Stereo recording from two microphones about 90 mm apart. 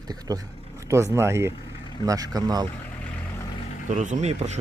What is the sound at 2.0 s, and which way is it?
Speech, 45° right (ahead or behind).